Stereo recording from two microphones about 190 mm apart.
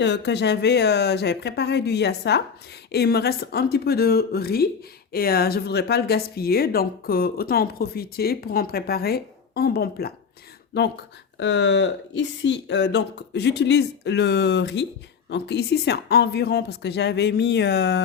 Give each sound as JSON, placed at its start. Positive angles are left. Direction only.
{"t": 0.0, "sound": "a woman's voice", "side_deg": 65}
{"t": 10.8, "sound": "a woman's voice", "side_deg": 65}